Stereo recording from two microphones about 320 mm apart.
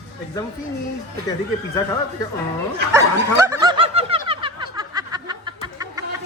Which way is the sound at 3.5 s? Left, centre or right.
Centre.